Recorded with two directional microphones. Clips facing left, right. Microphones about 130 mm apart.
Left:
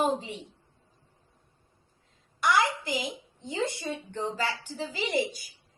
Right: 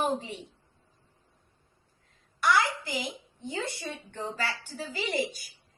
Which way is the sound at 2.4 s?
20° left (ahead or behind).